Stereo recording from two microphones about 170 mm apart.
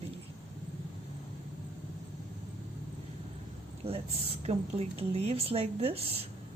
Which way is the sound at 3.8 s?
35° right (ahead or behind).